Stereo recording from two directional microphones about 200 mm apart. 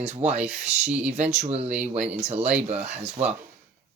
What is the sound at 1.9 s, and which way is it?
Speech, 5° right (ahead or behind).